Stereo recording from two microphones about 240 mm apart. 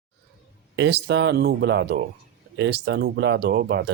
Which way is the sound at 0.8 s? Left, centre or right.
Right.